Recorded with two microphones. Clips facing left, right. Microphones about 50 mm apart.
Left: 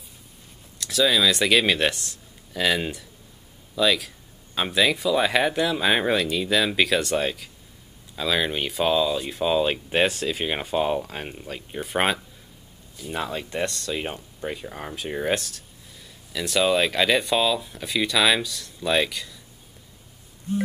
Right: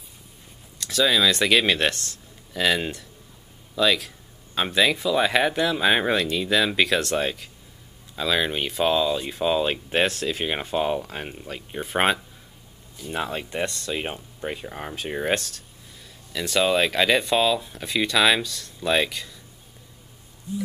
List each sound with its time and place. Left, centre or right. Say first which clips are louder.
0.7 s speech: even; centre
15.3 s speech: right 1 dB; centre
20.5 s a sound: left 4 dB; left